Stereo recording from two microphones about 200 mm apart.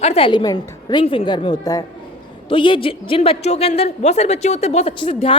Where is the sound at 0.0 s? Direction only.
30° left (ahead or behind).